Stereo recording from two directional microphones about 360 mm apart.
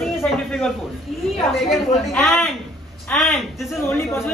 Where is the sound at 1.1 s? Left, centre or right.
Centre.